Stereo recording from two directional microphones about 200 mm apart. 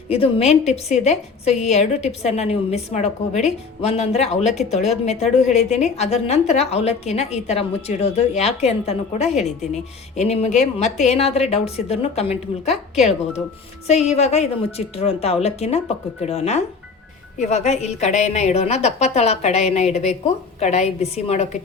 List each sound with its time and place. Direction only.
0.1 s a woman's voice: 30° left (ahead or behind)